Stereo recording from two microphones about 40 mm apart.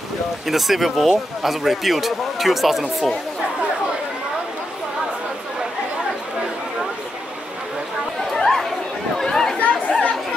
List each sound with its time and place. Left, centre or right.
0.5 s speech: centre
8.4 s chatter: centre
9.6 s chatter: left